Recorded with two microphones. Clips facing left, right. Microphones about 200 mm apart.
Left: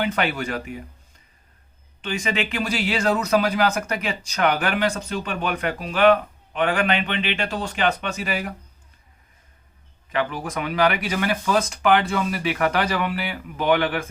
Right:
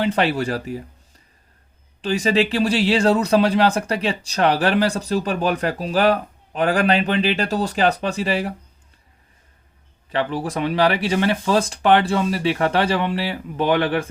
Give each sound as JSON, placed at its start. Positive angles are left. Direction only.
{"t": 0.0, "sound": "speech", "side_deg": -30}
{"t": 2.0, "sound": "speech", "side_deg": -35}
{"t": 10.1, "sound": "speech", "side_deg": -30}